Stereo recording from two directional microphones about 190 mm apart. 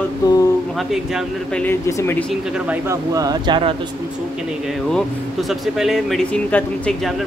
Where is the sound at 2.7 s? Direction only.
15° right (ahead or behind).